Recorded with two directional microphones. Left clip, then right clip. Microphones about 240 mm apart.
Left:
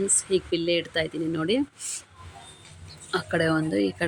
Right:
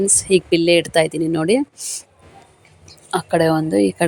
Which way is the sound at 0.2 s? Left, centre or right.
Right.